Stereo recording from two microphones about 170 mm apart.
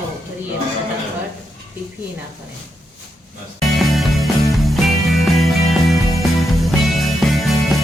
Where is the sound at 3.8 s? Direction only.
Centre (ahead or behind).